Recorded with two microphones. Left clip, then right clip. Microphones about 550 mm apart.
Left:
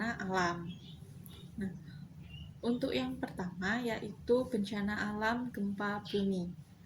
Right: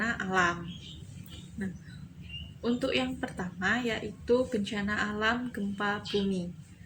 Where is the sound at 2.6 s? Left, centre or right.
Left.